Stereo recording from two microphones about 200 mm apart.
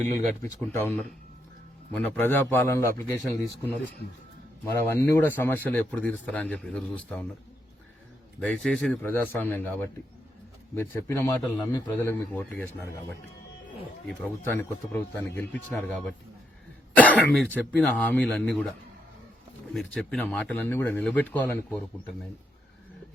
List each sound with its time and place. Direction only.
0.4 s a man's voice: 10° left (ahead or behind)
8.4 s a man's voice: 5° left (ahead or behind)
19.7 s a man's voice: 5° left (ahead or behind)